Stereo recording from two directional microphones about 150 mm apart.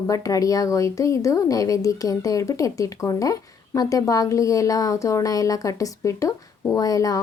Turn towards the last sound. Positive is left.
turn(degrees=25)  # may be behind; listen again after turning